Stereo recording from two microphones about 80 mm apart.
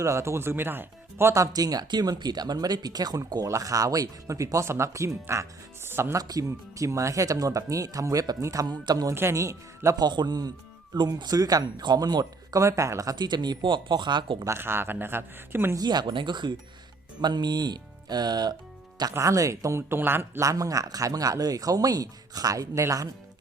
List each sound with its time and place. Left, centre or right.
0.0 s speech: right
1.3 s speech: right
6.1 s speech: right
8.8 s speech: right
9.1 s speech: right
9.9 s speech: right
12.2 s speech: right
13.1 s speech: right
14.4 s speech: right
15.7 s speech: right
19.2 s speech: right
20.0 s speech: right
20.4 s speech: right